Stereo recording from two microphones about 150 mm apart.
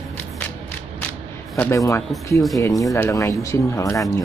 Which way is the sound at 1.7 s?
20° left (ahead or behind).